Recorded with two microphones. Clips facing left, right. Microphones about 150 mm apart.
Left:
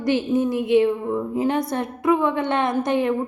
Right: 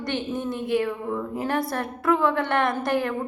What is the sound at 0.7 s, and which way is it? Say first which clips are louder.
A woman's voice: left 6 dB; 20° left (ahead or behind).